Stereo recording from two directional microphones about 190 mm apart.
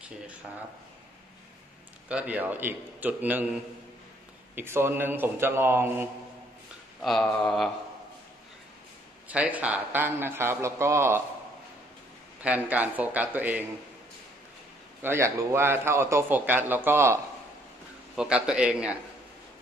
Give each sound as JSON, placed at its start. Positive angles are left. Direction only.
{"t": 2.0, "sound": "a man's voice", "side_deg": -5}
{"t": 4.6, "sound": "a man's voice", "side_deg": -10}
{"t": 7.0, "sound": "a man's voice", "side_deg": 0}
{"t": 9.3, "sound": "a man's voice", "side_deg": -5}
{"t": 12.4, "sound": "a man's voice", "side_deg": -10}
{"t": 15.0, "sound": "a man's voice", "side_deg": -15}